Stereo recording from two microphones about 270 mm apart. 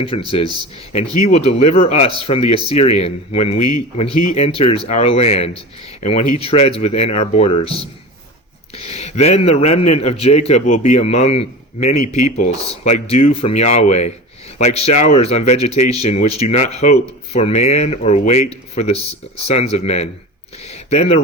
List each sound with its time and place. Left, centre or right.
0.3 s speech: centre
4.1 s speech: left
4.4 s speech: left